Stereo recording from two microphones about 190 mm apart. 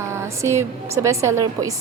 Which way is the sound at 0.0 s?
15° right (ahead or behind).